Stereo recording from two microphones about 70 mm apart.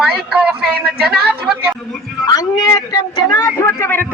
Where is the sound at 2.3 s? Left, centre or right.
Left.